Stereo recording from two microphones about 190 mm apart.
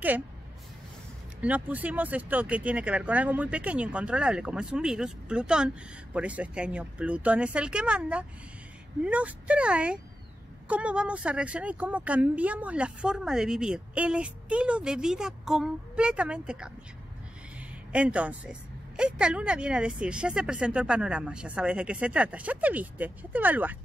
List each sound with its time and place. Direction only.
1.4 s a woman's voice: 10° right (ahead or behind)